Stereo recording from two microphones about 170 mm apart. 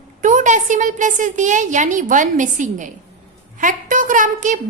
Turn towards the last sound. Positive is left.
turn(degrees=-50)  # may be behind; listen again after turning